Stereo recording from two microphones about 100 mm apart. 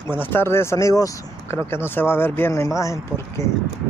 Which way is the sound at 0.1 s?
20° left (ahead or behind).